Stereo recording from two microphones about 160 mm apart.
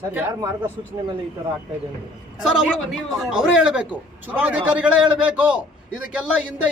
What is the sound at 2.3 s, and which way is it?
A man's voice, 5° right (ahead or behind).